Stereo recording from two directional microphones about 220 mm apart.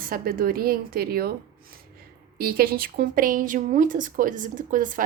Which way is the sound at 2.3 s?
40° right (ahead or behind).